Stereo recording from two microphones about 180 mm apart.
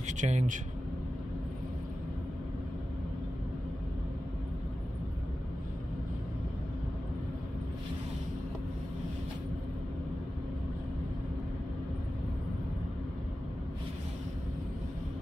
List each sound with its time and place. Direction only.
0.0 s speech: 40° right (ahead or behind)